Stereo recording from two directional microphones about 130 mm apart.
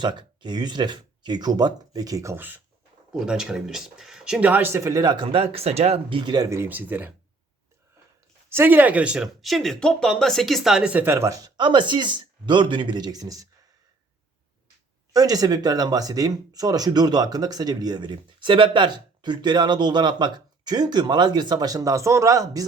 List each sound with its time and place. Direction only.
0.0 s speech: 35° right (ahead or behind); by 2.6 s 15° right (ahead or behind)
3.1 s speech: 5° right (ahead or behind)
8.4 s speech: 15° right (ahead or behind)
15.1 s speech: 30° right (ahead or behind)